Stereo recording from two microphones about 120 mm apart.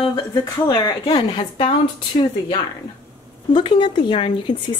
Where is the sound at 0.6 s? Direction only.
35° left (ahead or behind).